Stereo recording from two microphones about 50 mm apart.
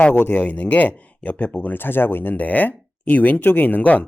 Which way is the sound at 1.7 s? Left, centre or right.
Left.